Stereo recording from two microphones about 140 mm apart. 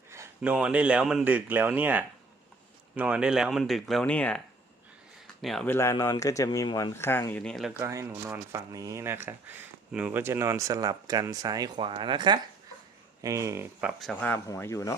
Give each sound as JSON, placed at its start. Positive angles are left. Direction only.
{"t": 0.4, "sound": "speech", "side_deg": -10}
{"t": 5.4, "sound": "speech", "side_deg": 0}
{"t": 5.6, "sound": "speech", "side_deg": 20}
{"t": 6.9, "sound": "speech", "side_deg": 15}
{"t": 7.9, "sound": "speech", "side_deg": -20}
{"t": 13.2, "sound": "speech", "side_deg": -20}
{"t": 13.8, "sound": "speech", "side_deg": 0}
{"t": 14.2, "sound": "speech", "side_deg": 15}